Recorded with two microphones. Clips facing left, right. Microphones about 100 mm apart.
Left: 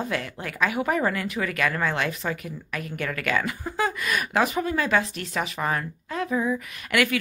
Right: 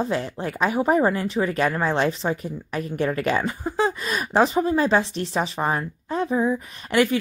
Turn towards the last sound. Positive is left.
turn(degrees=-30)  # may be behind; listen again after turning